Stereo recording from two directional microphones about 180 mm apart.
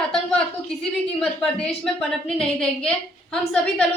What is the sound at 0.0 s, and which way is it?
A woman's voice, 5° left (ahead or behind).